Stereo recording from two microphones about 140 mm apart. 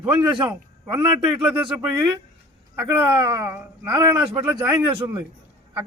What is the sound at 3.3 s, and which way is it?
Speech, 20° right (ahead or behind).